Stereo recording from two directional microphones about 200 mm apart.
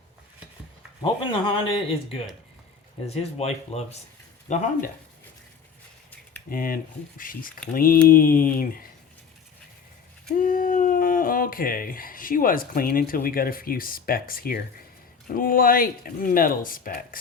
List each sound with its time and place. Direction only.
1.0 s speech: 25° left (ahead or behind)
6.5 s speech: 45° left (ahead or behind)
10.3 s speech: 45° left (ahead or behind)